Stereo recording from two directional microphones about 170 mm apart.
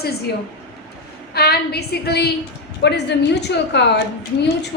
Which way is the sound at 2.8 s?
85° left.